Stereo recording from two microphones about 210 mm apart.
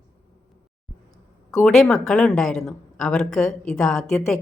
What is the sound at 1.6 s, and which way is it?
A woman's voice, 5° left (ahead or behind).